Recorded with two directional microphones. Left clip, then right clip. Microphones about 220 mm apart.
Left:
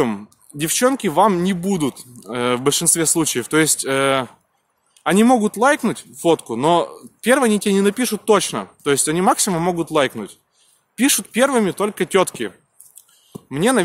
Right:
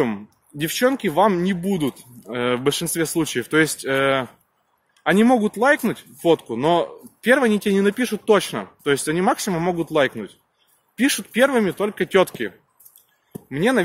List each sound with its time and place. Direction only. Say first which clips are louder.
0.0 s speech: left 2 dB; 25° left (ahead or behind)